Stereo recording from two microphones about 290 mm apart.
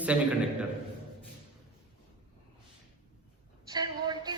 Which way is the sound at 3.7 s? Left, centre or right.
Centre.